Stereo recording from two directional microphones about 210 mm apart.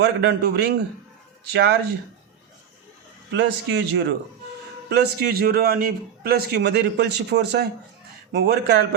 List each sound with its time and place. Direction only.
0.0 s a man's voice: 50° right (ahead or behind)
3.3 s a man's voice: 55° right (ahead or behind)